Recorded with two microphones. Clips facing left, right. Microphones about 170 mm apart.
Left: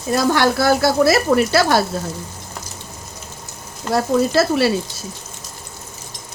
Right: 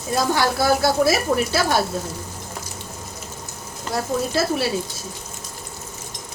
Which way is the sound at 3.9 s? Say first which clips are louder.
Left 6 dB; 90° left.